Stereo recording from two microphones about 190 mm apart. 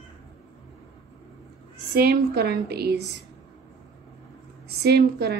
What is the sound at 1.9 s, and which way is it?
A woman's voice, 60° right (ahead or behind).